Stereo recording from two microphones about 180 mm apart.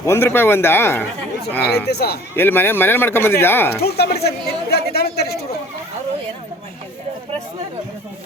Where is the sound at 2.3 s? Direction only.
10° left (ahead or behind).